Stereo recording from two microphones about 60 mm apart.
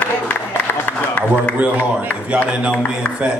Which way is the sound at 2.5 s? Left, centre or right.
Centre.